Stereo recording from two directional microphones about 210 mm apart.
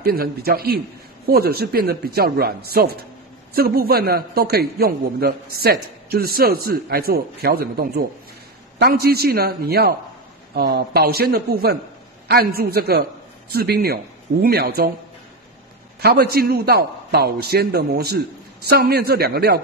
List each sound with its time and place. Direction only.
0.0 s a man's voice: 45° right (ahead or behind)
16.0 s a man's voice: 50° right (ahead or behind)